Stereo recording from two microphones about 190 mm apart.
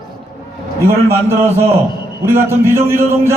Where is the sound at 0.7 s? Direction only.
15° right (ahead or behind).